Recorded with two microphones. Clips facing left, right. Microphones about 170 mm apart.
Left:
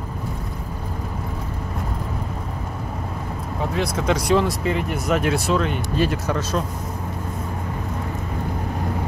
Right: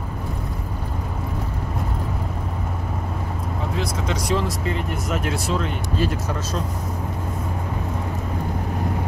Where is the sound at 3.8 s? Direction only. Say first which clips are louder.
Left 4 dB; 60° left (ahead or behind).